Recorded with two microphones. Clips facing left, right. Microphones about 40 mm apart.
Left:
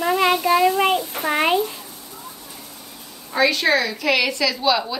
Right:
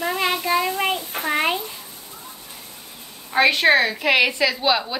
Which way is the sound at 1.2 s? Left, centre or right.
Centre.